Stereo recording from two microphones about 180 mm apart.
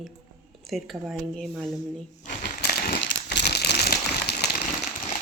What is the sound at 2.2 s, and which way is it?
Crumpling, 55° left (ahead or behind).